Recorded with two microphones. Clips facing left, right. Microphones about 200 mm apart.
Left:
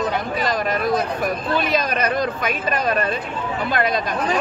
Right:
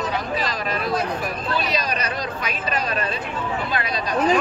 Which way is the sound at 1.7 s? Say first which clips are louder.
Left 5 dB; 50° left (ahead or behind).